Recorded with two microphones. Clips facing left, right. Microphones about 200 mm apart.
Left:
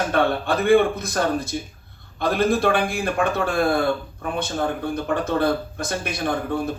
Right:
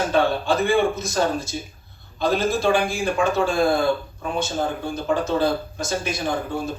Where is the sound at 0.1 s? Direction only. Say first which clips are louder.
Right 1 dB; 60° left (ahead or behind).